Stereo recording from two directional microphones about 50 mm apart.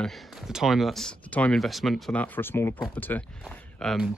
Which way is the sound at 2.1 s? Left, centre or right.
Left.